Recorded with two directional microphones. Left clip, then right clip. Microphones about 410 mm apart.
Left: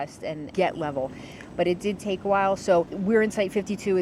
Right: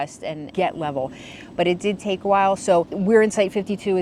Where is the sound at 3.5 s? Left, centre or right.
Right.